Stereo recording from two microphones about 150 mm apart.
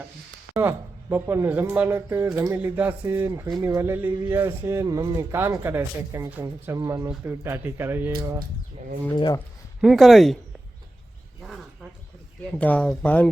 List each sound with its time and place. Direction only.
0.5 s speech: 15° right (ahead or behind)
9.1 s speech: 30° left (ahead or behind)
9.8 s speech: centre (ahead or behind)
12.5 s speech: 10° left (ahead or behind)